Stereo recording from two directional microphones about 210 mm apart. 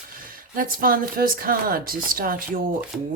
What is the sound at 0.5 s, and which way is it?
Speech, 40° right (ahead or behind).